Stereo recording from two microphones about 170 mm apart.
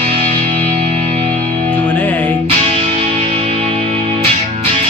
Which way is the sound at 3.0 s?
35° right (ahead or behind).